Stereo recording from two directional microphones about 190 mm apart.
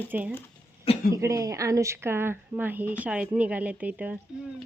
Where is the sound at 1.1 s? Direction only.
15° right (ahead or behind).